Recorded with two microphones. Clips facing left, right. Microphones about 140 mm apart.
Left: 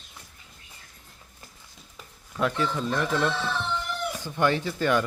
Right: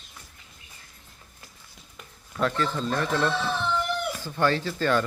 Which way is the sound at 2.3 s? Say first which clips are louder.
Even; 10° left (ahead or behind).